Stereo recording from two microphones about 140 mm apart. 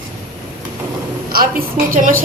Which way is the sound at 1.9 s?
70° right (ahead or behind).